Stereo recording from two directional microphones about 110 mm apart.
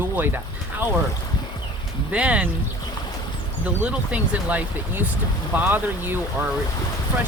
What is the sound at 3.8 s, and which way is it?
Speech, 10° right (ahead or behind).